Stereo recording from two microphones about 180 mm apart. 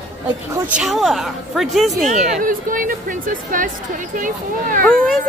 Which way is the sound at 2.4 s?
50° right (ahead or behind).